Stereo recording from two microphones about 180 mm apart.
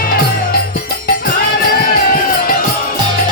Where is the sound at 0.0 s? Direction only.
55° left (ahead or behind).